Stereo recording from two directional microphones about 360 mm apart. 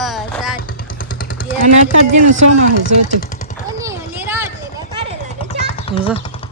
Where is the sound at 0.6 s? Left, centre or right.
Left.